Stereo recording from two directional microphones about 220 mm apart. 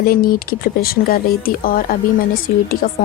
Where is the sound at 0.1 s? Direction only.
40° left (ahead or behind).